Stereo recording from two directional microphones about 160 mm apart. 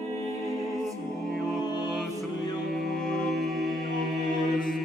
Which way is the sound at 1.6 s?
25° left (ahead or behind).